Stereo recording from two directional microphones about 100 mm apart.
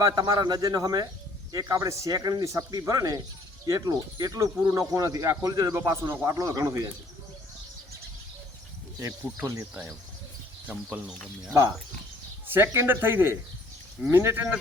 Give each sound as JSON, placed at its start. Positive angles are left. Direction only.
{"t": 0.0, "sound": "speech", "side_deg": -40}
{"t": 9.0, "sound": "speech", "side_deg": -30}
{"t": 12.5, "sound": "speech", "side_deg": -25}